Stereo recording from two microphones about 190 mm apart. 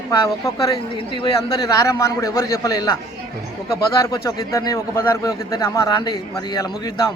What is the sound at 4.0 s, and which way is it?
A man's voice, 15° left (ahead or behind).